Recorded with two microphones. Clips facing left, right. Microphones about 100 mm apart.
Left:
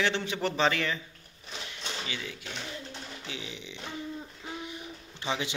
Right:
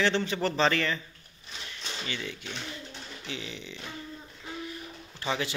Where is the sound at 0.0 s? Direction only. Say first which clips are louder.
Right 2 dB; 10° left (ahead or behind).